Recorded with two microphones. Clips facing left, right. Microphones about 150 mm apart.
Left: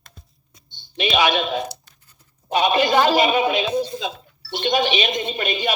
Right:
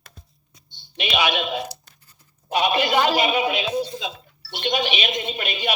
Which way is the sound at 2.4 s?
40° left (ahead or behind).